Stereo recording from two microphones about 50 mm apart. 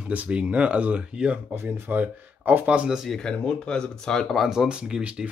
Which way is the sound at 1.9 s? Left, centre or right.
Right.